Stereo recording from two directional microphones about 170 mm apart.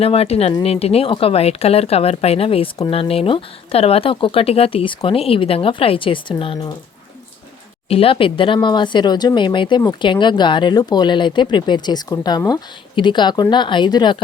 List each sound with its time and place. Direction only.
0.0 s speech: 35° left (ahead or behind)
7.9 s speech: 35° left (ahead or behind)